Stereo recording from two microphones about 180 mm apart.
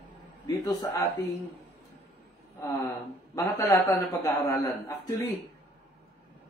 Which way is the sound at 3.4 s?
15° left (ahead or behind).